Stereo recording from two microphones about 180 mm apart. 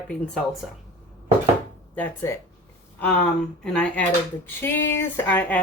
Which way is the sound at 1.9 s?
10° left (ahead or behind).